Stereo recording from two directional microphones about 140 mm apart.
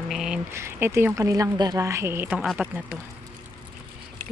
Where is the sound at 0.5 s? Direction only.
20° right (ahead or behind).